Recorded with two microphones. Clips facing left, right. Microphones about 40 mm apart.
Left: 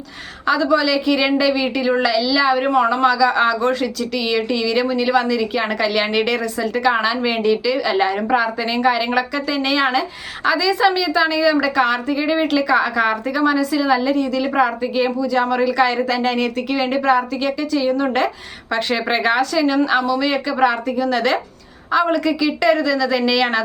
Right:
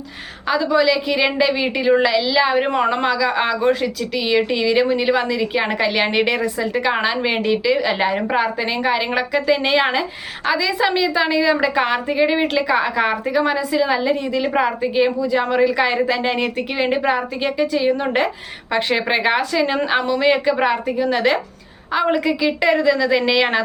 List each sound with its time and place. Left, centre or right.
0.4 s a woman's voice: centre